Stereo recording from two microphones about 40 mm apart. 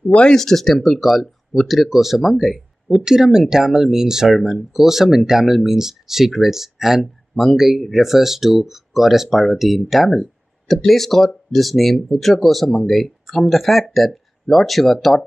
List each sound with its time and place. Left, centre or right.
0.1 s speech: left
0.4 s speech: centre
4.3 s speech: centre